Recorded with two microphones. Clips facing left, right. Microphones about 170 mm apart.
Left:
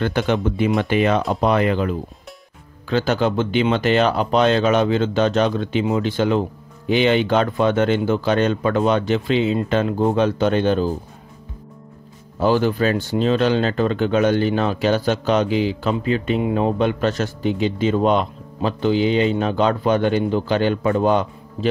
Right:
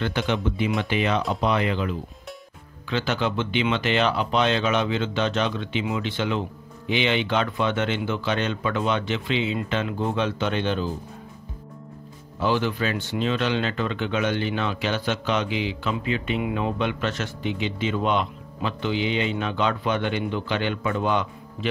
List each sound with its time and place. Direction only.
0.0 s speech: 45° left (ahead or behind)
12.4 s speech: 40° left (ahead or behind)